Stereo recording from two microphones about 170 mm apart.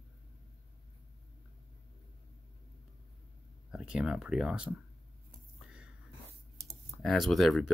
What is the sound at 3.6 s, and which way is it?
Speech, 5° right (ahead or behind).